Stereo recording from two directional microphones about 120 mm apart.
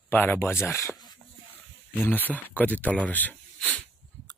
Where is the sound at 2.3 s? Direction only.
15° left (ahead or behind).